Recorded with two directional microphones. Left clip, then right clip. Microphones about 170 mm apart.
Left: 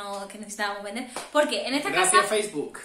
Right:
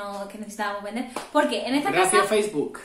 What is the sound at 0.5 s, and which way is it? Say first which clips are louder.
A woman's voice: right 1 dB; 25° left (ahead or behind).